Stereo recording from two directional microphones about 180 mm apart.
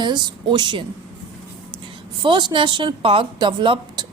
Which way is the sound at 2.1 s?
25° right (ahead or behind).